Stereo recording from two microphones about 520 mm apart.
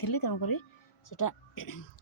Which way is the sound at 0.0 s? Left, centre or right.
Left.